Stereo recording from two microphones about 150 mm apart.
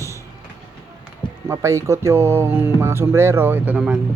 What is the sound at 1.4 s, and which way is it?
Speech, 20° right (ahead or behind).